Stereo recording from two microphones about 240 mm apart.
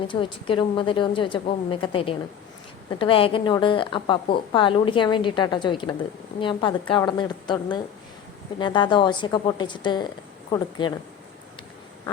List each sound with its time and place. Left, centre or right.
0.1 s a woman's voice: left